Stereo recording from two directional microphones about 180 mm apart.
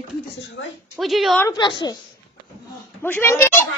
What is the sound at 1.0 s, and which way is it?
Speech, centre (ahead or behind).